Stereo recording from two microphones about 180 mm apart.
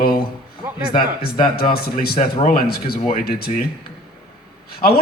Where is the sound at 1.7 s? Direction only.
60° left (ahead or behind).